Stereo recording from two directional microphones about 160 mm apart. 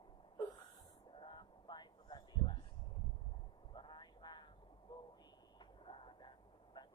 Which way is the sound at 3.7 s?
30° left (ahead or behind).